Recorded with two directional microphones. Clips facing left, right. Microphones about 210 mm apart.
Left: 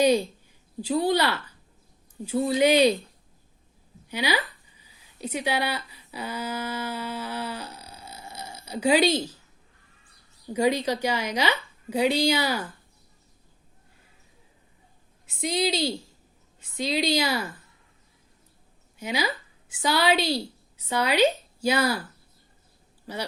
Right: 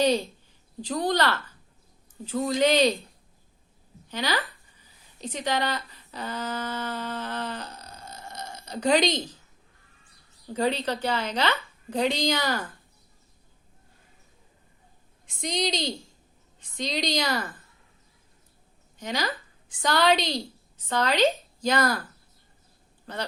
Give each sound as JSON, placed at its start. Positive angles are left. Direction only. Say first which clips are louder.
{"t": 0.0, "sound": "a woman's voice", "louder": "left 3 dB", "side_deg": 10}
{"t": 4.1, "sound": "speech", "louder": "left 2 dB", "side_deg": 10}
{"t": 10.5, "sound": "a woman's voice", "louder": "left 3 dB", "side_deg": 10}
{"t": 15.3, "sound": "a woman's voice", "louder": "left 3 dB", "side_deg": 5}
{"t": 18.9, "sound": "a woman's voice", "louder": "left 2 dB", "side_deg": 10}